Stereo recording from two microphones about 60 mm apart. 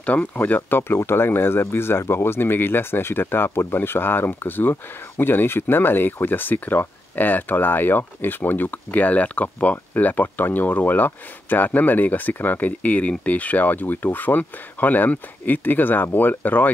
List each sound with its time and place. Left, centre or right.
0.0 s speech: left
0.6 s speech: left